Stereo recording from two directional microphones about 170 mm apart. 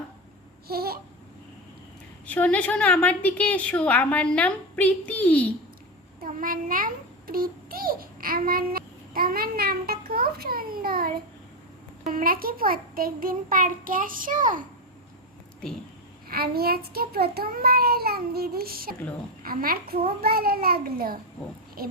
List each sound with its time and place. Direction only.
0.7 s babbling: 65° right (ahead or behind)
2.2 s a woman's voice: 10° left (ahead or behind)
6.2 s a child's voice: 55° right (ahead or behind)
16.3 s a child's voice: 65° right (ahead or behind)